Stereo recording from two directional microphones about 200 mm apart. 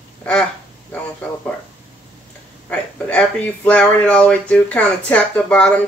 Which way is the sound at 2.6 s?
5° left (ahead or behind).